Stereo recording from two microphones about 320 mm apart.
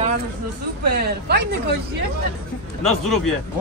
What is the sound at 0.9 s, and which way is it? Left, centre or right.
Speech, right.